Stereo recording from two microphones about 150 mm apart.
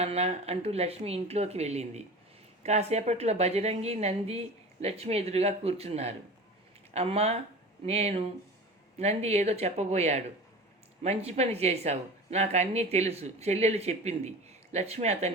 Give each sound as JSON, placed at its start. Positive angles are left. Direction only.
{"t": 0.0, "sound": "a woman's voice", "side_deg": -45}
{"t": 11.3, "sound": "a woman's voice", "side_deg": -45}